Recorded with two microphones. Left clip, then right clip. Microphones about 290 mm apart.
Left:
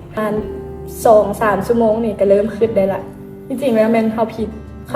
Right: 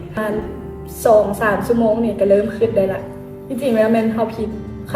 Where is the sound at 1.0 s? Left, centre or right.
Left.